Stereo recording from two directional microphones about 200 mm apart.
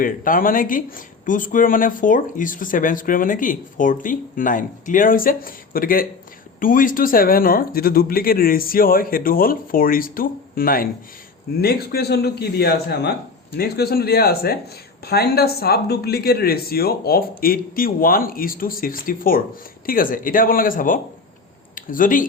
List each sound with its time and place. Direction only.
0.0 s speech: 45° left (ahead or behind)